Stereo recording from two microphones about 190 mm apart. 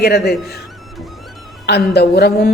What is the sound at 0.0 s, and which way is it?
Speech, 60° left (ahead or behind).